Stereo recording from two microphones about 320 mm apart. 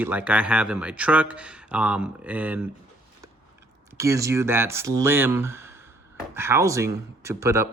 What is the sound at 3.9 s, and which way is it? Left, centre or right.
Speech, centre.